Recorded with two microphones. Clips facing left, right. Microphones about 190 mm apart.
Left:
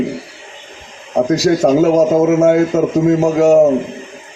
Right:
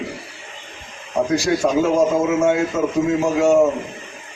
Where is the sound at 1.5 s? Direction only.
45° left (ahead or behind).